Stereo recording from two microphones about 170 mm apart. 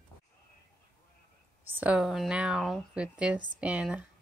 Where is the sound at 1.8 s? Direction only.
5° right (ahead or behind).